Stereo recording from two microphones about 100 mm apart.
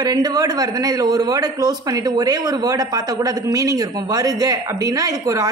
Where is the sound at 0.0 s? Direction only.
40° right (ahead or behind).